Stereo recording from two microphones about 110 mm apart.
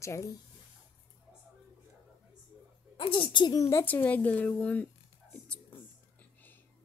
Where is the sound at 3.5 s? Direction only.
30° left (ahead or behind).